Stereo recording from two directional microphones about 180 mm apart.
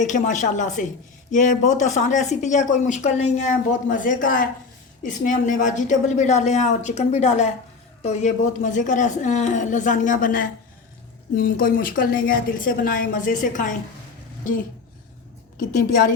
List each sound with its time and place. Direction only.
0.0 s a woman's voice: 45° left (ahead or behind)
15.5 s speech: 50° left (ahead or behind)